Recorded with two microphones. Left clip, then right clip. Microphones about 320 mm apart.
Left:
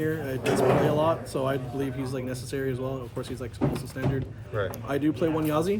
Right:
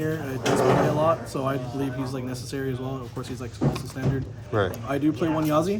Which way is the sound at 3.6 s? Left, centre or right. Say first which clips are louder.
Right 1 dB; left.